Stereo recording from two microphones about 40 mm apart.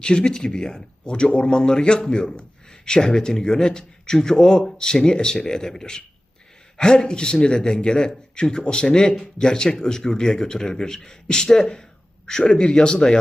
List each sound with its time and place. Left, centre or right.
0.0 s a man's voice: left